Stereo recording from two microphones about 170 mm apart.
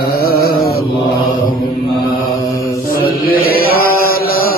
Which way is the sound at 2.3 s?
20° left (ahead or behind).